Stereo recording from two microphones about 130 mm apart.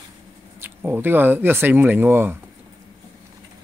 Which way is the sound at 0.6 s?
15° right (ahead or behind).